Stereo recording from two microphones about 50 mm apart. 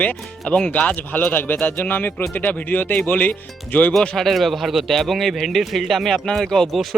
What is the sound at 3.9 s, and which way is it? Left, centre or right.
Speech, centre.